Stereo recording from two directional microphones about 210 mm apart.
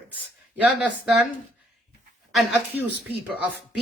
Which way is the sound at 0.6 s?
5° right (ahead or behind).